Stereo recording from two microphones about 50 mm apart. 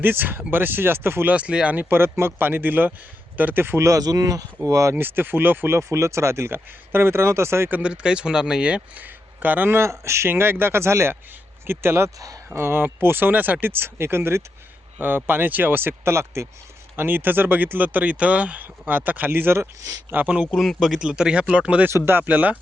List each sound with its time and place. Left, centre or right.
0.0 s speech: right
1.3 s speech: right
1.9 s speech: right
4.6 s speech: right
4.9 s speech: right
5.7 s speech: right
7.7 s speech: right
9.0 s speech: right
9.7 s speech: right
10.2 s speech: right
17.0 s speech: right
20.2 s speech: right
20.5 s speech: centre; by 21.8 s right
22.0 s speech: right